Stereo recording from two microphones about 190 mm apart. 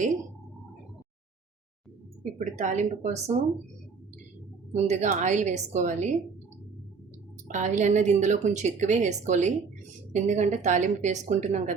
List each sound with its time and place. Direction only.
2.4 s a woman's voice: 40° right (ahead or behind)
4.7 s a woman's voice: 35° right (ahead or behind)
7.4 s a woman's voice: 40° right (ahead or behind)